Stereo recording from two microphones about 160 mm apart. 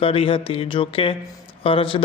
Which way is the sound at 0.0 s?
35° left (ahead or behind).